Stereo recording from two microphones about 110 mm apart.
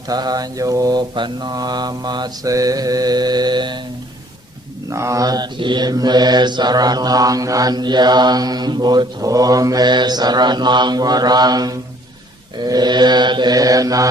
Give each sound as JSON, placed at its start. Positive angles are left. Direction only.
{"t": 0.1, "sound": "mantra", "side_deg": -35}
{"t": 4.9, "sound": "mantra", "side_deg": -30}